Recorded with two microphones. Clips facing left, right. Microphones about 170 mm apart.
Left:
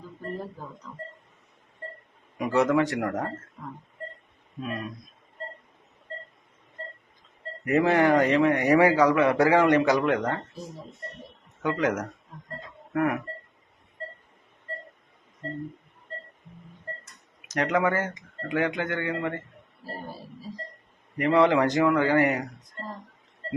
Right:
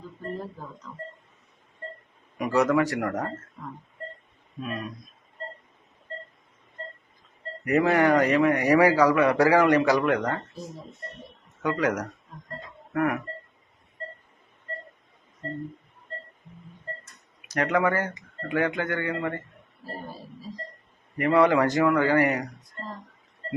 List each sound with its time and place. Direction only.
2.4 s speech: 25° left (ahead or behind)
7.6 s speech: 20° left (ahead or behind)
11.6 s speech: 25° left (ahead or behind)
12.9 s a sound: 20° left (ahead or behind)
17.5 s speech: 20° left (ahead or behind)
21.2 s speech: 20° left (ahead or behind)